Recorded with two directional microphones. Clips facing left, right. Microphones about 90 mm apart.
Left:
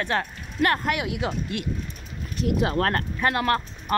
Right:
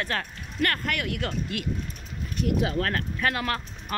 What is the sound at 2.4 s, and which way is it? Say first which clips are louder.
Speech: left 3 dB; 70° left (ahead or behind).